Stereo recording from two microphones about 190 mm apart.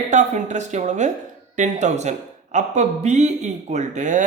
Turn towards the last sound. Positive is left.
turn(degrees=-40)  # may be behind; listen again after turning